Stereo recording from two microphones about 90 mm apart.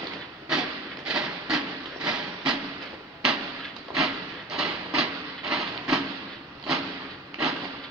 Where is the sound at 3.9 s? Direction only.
5° right (ahead or behind).